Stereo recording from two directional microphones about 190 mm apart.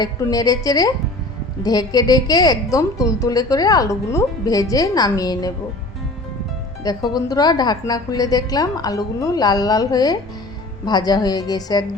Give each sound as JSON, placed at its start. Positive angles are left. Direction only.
{"t": 0.0, "sound": "a woman's voice", "side_deg": 20}
{"t": 6.8, "sound": "a woman's voice", "side_deg": 20}